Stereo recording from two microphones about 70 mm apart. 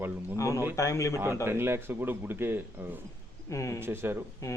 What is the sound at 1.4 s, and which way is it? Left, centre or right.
Speech, right.